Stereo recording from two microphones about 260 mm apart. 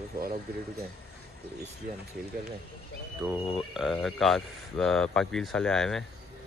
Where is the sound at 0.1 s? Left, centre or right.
Right.